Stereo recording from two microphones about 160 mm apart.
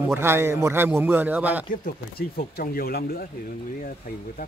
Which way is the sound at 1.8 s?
70° left (ahead or behind).